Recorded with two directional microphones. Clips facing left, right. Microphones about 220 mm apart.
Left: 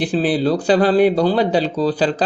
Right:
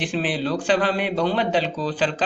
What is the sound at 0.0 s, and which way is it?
Speech, 35° left (ahead or behind).